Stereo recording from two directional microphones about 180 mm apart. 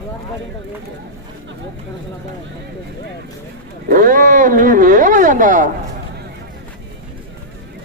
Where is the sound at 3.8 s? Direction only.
50° right (ahead or behind).